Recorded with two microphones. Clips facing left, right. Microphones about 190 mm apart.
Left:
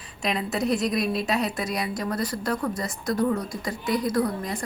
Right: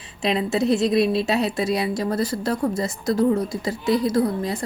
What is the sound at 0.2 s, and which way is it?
A woman's voice, 25° right (ahead or behind).